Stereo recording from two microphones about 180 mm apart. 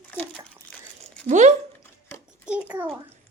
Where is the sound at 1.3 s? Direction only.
40° right (ahead or behind).